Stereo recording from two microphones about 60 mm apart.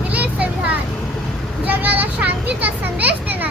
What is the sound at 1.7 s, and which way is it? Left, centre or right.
Children playing, right.